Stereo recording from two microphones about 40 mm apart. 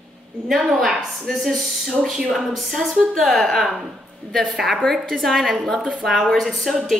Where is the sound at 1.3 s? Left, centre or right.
Centre.